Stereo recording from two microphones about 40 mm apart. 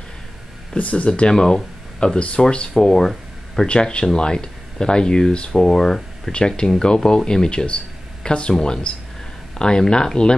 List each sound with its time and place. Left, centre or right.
0.7 s speech: left
2.7 s speech: centre
5.5 s speech: centre